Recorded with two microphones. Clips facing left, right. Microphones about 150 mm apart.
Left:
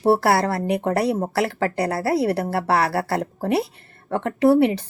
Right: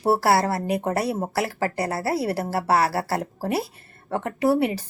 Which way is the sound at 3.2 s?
Centre (ahead or behind).